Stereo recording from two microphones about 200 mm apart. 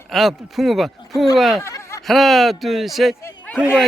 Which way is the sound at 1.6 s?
15° left (ahead or behind).